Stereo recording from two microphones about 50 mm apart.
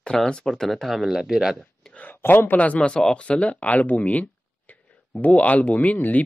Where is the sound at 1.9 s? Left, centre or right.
Left.